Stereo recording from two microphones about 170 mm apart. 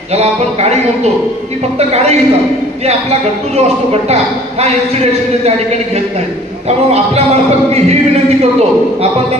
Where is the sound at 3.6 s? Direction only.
40° right (ahead or behind).